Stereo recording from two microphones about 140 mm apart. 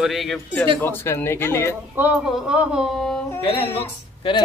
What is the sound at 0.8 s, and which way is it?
Speech, 15° left (ahead or behind).